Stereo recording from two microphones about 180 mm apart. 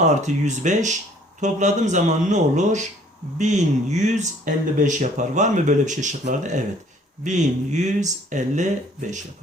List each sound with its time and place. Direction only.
0.0 s speech: 40° right (ahead or behind)